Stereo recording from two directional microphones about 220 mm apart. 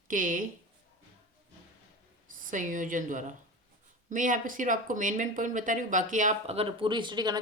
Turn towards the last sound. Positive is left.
turn(degrees=-20)  # may be behind; listen again after turning